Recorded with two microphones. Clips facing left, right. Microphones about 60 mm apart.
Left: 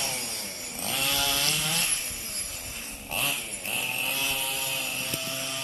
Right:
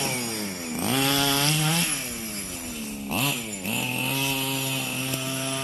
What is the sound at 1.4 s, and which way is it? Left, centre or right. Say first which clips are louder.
Chainsaw: right 5 dB; right.